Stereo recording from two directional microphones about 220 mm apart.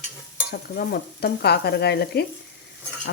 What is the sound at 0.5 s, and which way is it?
Cutlery, 45° left (ahead or behind).